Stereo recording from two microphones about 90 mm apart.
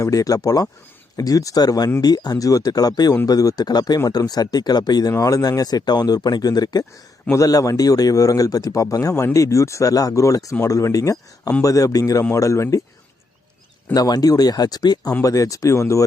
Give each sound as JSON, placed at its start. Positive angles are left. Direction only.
{"t": 0.0, "sound": "speech", "side_deg": 40}
{"t": 13.9, "sound": "speech", "side_deg": 45}